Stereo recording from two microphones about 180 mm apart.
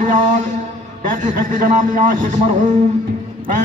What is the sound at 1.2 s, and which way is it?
A man's voice, 45° right (ahead or behind).